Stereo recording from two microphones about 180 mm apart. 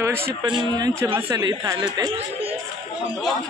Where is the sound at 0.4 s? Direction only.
25° right (ahead or behind).